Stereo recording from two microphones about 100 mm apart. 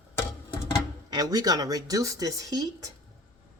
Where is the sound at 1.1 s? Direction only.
40° right (ahead or behind).